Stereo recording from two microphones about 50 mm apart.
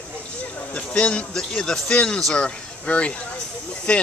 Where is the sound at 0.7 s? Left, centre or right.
Left.